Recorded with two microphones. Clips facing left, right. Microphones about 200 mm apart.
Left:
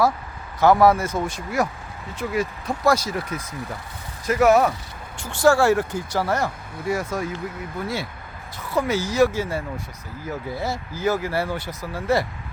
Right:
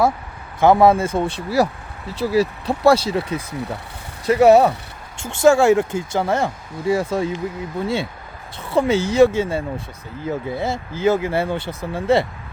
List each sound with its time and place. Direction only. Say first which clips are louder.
0.6 s speech: right 3 dB; 25° right (ahead or behind)